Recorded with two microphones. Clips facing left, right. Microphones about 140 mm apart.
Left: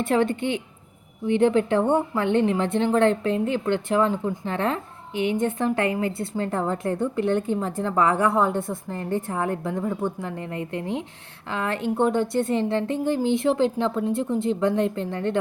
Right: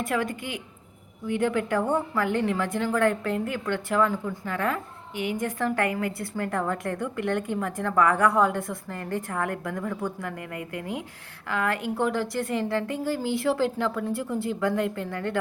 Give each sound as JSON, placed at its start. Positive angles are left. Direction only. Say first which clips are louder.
{"t": 0.0, "sound": "a woman's voice", "louder": "left 6 dB", "side_deg": 25}